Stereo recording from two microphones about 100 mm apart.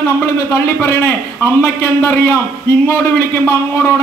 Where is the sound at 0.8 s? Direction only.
25° left (ahead or behind).